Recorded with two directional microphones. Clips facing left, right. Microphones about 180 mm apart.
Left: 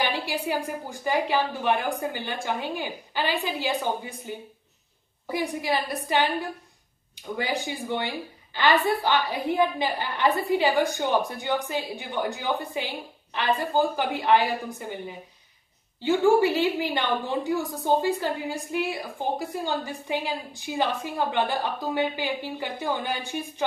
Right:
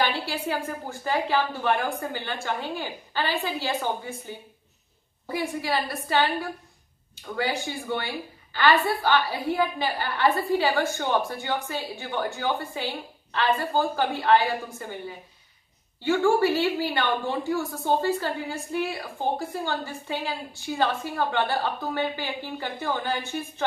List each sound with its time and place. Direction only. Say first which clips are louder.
0.0 s a woman's voice: right 1 dB; 15° left (ahead or behind)